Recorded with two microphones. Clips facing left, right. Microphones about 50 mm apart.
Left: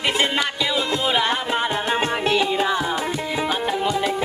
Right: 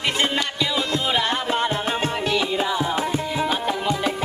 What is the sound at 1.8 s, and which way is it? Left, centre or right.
Music, centre.